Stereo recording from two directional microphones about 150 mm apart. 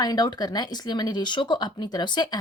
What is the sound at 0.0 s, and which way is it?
Speech, 25° left (ahead or behind).